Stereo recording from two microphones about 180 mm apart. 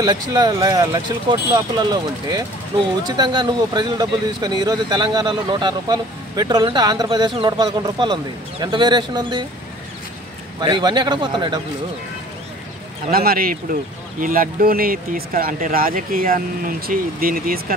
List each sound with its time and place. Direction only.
0.0 s speech: 25° right (ahead or behind)
10.6 s speech: 25° right (ahead or behind)
13.1 s speech: 55° right (ahead or behind)